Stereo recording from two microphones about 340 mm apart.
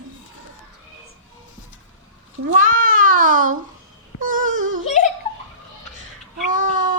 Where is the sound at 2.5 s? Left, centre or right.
Right.